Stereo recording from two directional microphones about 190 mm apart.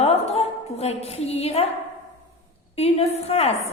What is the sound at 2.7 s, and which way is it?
Speech, 35° left (ahead or behind).